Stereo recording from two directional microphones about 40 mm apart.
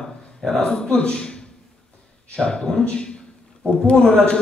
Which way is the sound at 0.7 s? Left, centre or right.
Centre.